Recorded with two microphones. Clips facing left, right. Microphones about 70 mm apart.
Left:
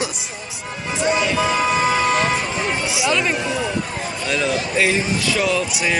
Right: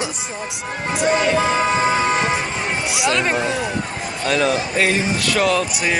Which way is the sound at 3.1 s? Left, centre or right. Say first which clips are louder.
Right 2 dB; right.